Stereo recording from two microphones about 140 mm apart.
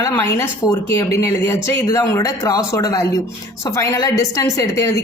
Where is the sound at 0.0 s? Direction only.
20° left (ahead or behind).